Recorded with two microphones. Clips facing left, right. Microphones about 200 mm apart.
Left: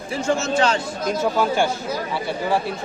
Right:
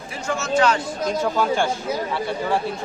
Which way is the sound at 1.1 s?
5° left (ahead or behind).